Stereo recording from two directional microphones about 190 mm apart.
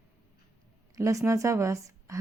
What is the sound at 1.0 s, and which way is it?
Speech, 15° right (ahead or behind).